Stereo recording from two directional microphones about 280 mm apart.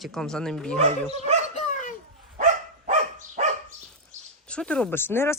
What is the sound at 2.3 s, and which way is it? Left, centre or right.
Dog, right.